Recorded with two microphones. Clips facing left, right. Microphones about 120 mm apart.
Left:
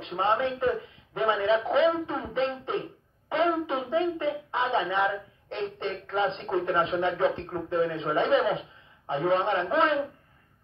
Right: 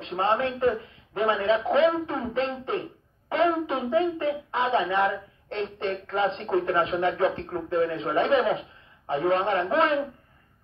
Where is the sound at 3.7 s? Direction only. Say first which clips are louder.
Right 2 dB; 15° left (ahead or behind).